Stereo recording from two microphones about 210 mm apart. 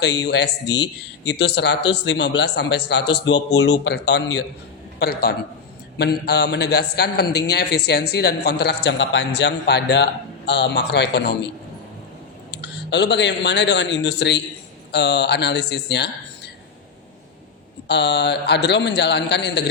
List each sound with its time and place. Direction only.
0.0 s a man's voice: 55° left (ahead or behind)
12.5 s a man's voice: 55° left (ahead or behind)
17.8 s speech: 55° left (ahead or behind)